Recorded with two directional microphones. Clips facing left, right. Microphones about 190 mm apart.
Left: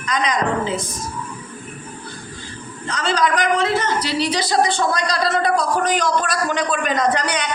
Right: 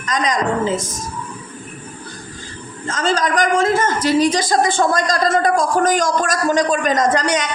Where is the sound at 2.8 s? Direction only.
45° right (ahead or behind).